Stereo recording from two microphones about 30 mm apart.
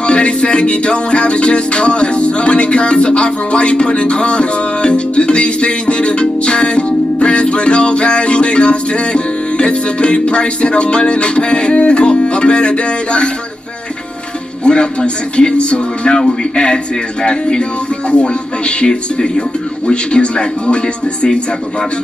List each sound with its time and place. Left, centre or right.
0.0 s music: left
14.6 s speech: left
18.0 s speech: left
18.9 s speech: left